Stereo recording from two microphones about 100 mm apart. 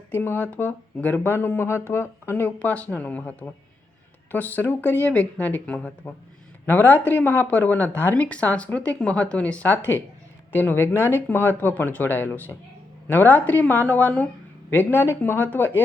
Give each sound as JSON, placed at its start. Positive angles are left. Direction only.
{"t": 0.1, "sound": "speech", "side_deg": 20}